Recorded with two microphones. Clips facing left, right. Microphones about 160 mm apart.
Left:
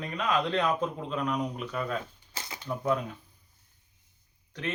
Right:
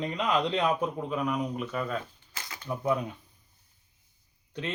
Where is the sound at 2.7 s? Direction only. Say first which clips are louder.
Even; 15° right (ahead or behind).